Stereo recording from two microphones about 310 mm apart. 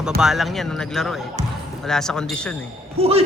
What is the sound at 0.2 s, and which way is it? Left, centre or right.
Speech, centre.